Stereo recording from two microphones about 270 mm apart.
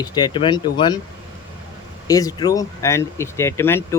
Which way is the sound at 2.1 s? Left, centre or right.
Centre.